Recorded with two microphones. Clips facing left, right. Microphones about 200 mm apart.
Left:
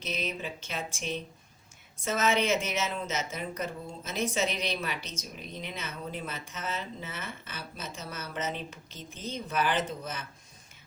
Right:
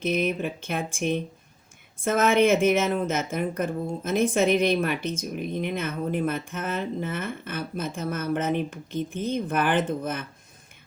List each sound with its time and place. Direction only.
0.0 s speech: 55° right (ahead or behind)